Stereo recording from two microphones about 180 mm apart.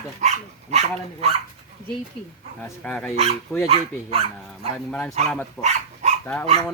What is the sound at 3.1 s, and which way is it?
Speech, 35° right (ahead or behind).